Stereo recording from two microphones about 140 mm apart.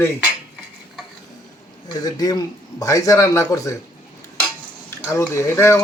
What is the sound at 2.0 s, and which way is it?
Speech, 25° left (ahead or behind).